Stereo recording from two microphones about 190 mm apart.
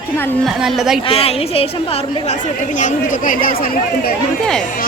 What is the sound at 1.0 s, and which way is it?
A woman's voice, 30° left (ahead or behind).